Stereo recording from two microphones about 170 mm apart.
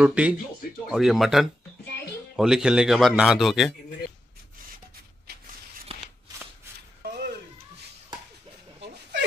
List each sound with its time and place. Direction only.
0.0 s a man's voice: 5° right (ahead or behind)
5.2 s shuffle: 65° right (ahead or behind)
7.1 s a sound: 70° right (ahead or behind)